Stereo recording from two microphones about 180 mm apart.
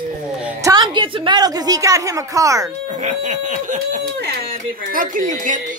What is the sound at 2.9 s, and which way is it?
Speech, 40° right (ahead or behind).